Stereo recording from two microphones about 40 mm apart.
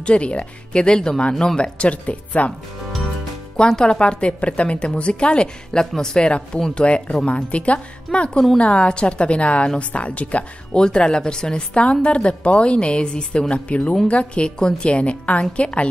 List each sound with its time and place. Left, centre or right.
0.0 s a woman's voice: left
3.5 s a woman's voice: centre
6.7 s a woman's voice: left
10.8 s a woman's voice: left